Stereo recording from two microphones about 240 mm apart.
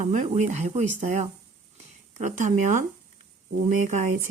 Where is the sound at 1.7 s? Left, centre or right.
Right.